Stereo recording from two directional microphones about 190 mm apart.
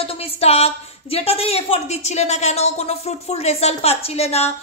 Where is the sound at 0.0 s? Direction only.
30° left (ahead or behind).